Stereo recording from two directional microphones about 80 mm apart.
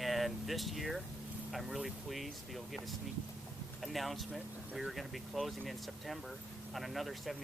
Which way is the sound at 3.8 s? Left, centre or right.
Centre.